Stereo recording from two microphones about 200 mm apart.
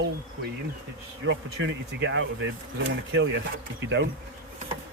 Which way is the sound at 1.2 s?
70° right (ahead or behind).